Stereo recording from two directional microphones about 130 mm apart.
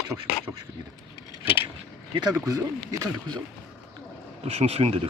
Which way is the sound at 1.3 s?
45° left (ahead or behind).